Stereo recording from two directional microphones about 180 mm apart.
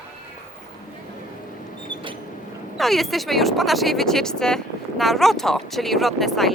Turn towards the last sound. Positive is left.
turn(degrees=0)  # may be behind; listen again after turning